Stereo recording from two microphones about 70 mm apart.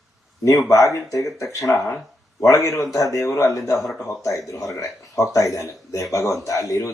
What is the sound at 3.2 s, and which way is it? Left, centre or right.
Speech, left.